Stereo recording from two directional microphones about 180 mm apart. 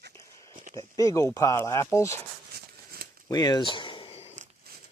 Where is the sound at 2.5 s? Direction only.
55° right (ahead or behind).